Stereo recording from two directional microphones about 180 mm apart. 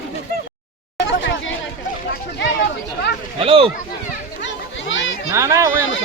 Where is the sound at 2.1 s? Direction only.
65° left (ahead or behind).